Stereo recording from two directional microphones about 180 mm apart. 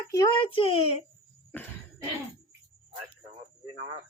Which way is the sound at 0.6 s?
30° left (ahead or behind).